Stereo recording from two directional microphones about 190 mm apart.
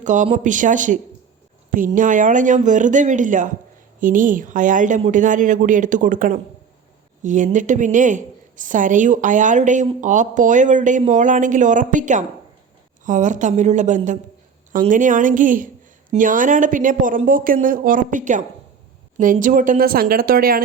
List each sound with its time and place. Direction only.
0.0 s a woman's voice: 40° right (ahead or behind)